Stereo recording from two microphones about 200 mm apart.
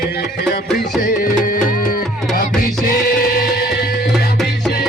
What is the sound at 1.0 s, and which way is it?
Music, 45° left (ahead or behind).